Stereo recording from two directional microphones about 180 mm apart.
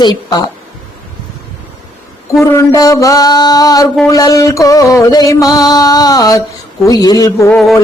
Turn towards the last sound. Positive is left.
turn(degrees=15)  # may be behind; listen again after turning